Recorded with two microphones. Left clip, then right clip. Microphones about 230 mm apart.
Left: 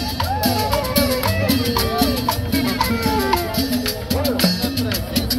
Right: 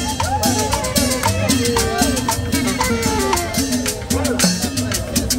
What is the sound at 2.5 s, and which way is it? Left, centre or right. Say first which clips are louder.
Music: right 2 dB; centre.